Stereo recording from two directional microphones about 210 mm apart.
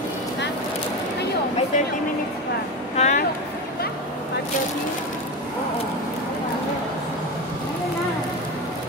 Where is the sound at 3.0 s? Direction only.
30° left (ahead or behind).